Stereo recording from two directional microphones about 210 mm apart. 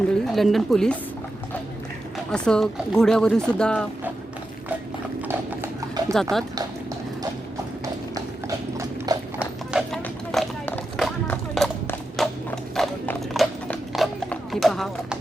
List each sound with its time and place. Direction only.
0.1 s speech: centre (ahead or behind)
2.3 s speech: 5° left (ahead or behind)
5.3 s clip-clop: 10° right (ahead or behind)
8.1 s clip-clop: 15° right (ahead or behind)
9.7 s a sound: centre (ahead or behind)